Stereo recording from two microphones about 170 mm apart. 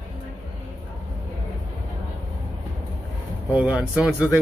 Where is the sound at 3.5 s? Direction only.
Centre (ahead or behind).